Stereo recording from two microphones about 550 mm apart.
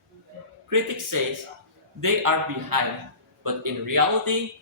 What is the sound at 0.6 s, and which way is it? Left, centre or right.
A man's voice, right.